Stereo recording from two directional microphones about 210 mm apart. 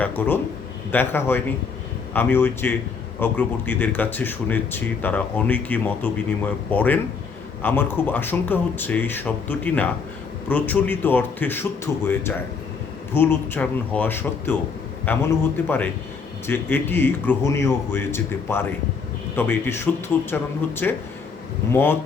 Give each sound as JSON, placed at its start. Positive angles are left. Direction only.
{"t": 0.0, "sound": "speech", "side_deg": 10}
{"t": 13.1, "sound": "speech", "side_deg": 10}